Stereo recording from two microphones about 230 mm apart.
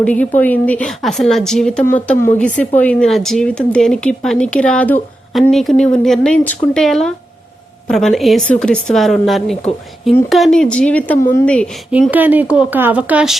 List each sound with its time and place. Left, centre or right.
0.0 s speech: centre